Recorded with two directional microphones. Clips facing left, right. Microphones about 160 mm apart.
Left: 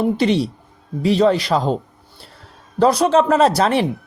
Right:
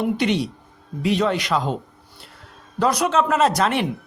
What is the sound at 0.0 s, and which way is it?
Speech, 35° left (ahead or behind).